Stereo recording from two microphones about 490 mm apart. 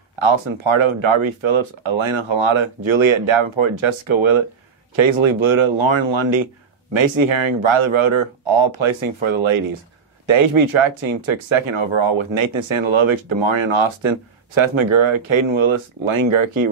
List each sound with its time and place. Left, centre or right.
0.2 s speech: right